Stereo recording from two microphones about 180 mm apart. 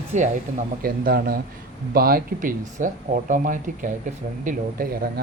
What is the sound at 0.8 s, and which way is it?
Speech, 55° right (ahead or behind).